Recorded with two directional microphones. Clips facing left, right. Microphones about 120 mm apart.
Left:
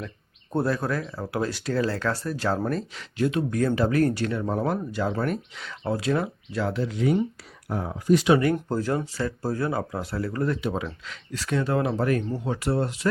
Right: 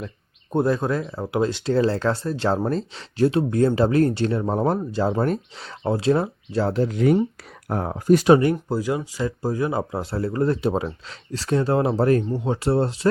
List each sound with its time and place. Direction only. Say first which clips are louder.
0.5 s speech: right 4 dB; 20° right (ahead or behind); by 8.4 s 45° right (ahead or behind)
8.7 s speech: right 2 dB; 10° right (ahead or behind); by 13.1 s 30° right (ahead or behind)